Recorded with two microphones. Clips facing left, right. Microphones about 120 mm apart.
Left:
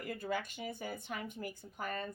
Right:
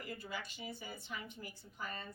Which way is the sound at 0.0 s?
50° left (ahead or behind).